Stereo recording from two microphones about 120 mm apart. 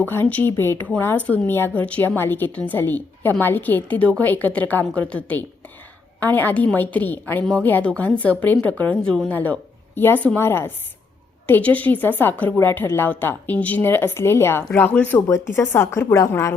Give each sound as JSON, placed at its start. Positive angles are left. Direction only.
{"t": 0.0, "sound": "a woman's voice", "side_deg": 15}